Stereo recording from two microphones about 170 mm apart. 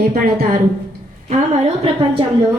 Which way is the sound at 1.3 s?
35° right (ahead or behind).